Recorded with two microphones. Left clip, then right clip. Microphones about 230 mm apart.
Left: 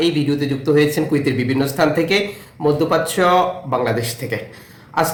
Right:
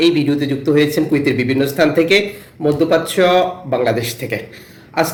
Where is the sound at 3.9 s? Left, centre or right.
Left.